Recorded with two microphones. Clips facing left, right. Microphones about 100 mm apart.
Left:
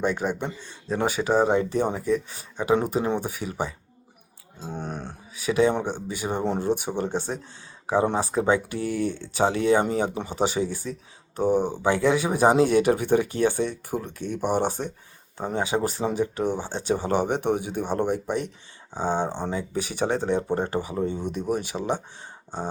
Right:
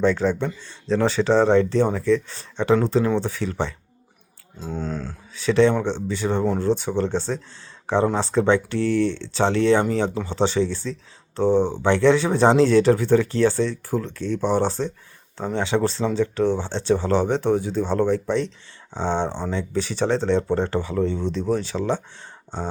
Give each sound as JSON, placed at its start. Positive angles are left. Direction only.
{"t": 0.0, "sound": "speech", "side_deg": 10}